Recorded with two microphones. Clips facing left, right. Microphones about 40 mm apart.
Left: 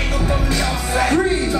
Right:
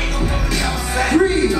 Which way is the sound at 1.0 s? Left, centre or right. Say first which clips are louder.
Right 4 dB; right.